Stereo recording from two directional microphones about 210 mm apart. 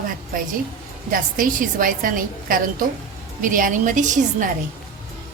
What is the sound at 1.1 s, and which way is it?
A woman's voice, 40° right (ahead or behind).